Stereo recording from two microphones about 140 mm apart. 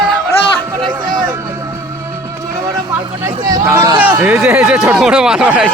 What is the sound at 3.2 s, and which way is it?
Speech, 20° right (ahead or behind).